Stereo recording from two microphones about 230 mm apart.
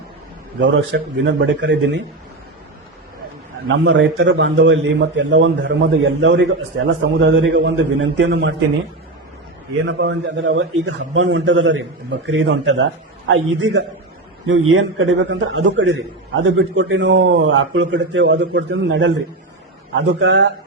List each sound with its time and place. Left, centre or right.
0.6 s a man's voice: right
3.7 s a man's voice: right
9.8 s a man's voice: right